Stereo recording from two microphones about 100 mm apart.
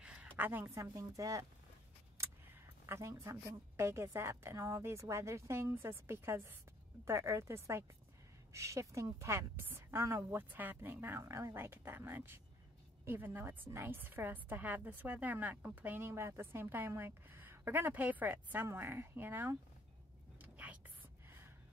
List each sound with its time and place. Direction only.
0.0 s a woman's voice: 10° right (ahead or behind); by 1.4 s 35° right (ahead or behind)
2.1 s a sound: 25° right (ahead or behind)
3.7 s a woman's voice: 25° right (ahead or behind)
20.4 s whispering: 15° right (ahead or behind)